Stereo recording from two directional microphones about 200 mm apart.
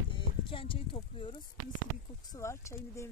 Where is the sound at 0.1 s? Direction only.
25° left (ahead or behind).